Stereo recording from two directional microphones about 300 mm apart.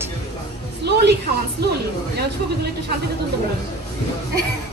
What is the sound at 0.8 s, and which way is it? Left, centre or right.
Speech, right.